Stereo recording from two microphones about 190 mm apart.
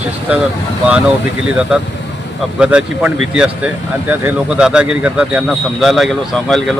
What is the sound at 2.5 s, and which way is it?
Speech, 5° right (ahead or behind).